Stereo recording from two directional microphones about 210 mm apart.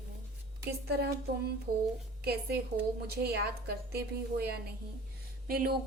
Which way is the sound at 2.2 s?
50° right (ahead or behind).